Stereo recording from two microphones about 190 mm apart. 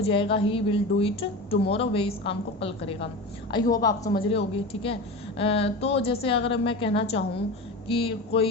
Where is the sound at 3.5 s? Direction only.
20° left (ahead or behind).